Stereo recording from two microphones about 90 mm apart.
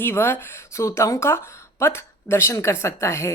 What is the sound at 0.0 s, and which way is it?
A woman's voice, 25° left (ahead or behind).